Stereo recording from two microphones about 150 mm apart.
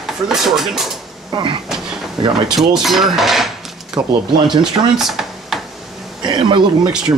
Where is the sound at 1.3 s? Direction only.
30° right (ahead or behind).